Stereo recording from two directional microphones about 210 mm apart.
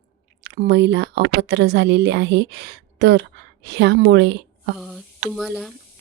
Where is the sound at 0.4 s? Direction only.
55° right (ahead or behind).